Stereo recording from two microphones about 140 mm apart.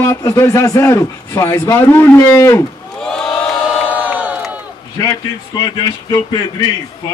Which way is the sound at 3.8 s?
10° right (ahead or behind).